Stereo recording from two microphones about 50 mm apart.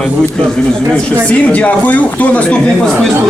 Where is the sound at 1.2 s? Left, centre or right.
Left.